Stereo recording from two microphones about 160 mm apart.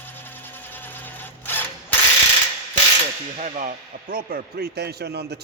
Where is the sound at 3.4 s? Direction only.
55° right (ahead or behind).